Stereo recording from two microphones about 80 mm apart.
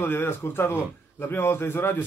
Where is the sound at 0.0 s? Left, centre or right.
Left.